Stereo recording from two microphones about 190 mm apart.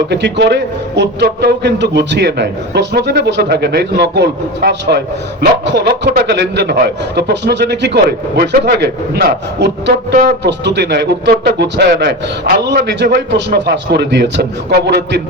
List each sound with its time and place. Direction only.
0.1 s a man's voice: 65° right (ahead or behind)